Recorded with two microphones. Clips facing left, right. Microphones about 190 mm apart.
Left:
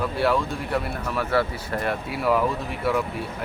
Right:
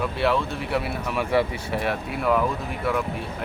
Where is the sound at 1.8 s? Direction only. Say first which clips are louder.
Left 1 dB; centre (ahead or behind).